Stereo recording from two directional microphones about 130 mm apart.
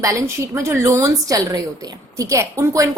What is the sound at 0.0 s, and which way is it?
A woman's voice, 25° right (ahead or behind).